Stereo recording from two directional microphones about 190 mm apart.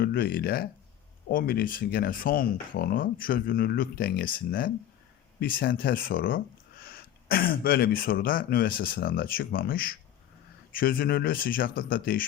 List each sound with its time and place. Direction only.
0.0 s speech: 50° left (ahead or behind)